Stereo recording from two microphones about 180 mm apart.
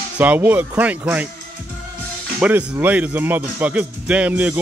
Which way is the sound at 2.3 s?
10° right (ahead or behind).